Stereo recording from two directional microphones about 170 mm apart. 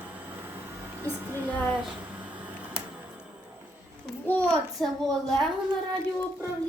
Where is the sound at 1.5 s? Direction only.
10° left (ahead or behind).